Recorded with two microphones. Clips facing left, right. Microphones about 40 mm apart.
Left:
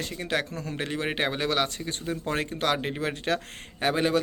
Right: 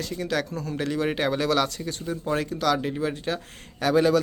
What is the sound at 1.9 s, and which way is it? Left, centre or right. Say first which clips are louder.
Speech: right 2 dB; left.